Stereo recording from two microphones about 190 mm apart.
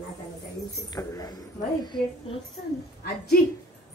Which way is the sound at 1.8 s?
25° left (ahead or behind).